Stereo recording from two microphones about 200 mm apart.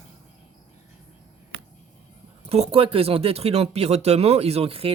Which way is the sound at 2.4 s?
30° right (ahead or behind).